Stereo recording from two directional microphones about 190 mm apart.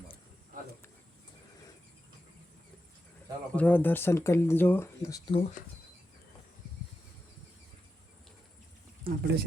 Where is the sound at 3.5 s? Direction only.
10° left (ahead or behind).